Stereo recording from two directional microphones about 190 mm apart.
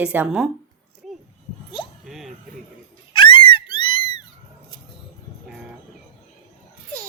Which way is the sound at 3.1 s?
25° left (ahead or behind).